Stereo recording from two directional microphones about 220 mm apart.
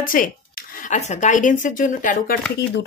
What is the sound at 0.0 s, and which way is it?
Speech, 40° left (ahead or behind).